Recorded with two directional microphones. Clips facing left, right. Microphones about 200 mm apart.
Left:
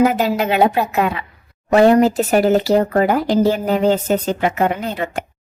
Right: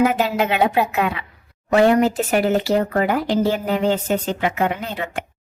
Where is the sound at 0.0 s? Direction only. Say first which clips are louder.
Left 2 dB; 40° left (ahead or behind).